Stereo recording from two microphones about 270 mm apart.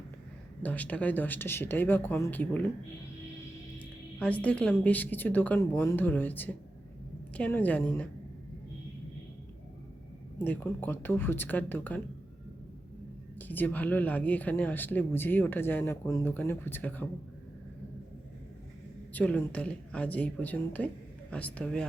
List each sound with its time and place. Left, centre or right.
0.6 s speech: centre
3.8 s a woman's voice: centre
10.3 s speech: centre
13.4 s speech: centre
19.1 s a woman's voice: centre